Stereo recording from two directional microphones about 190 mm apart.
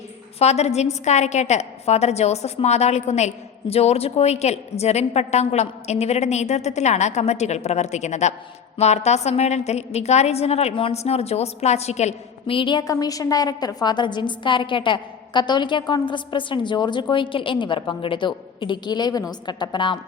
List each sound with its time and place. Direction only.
0.3 s a woman's voice: 35° left (ahead or behind)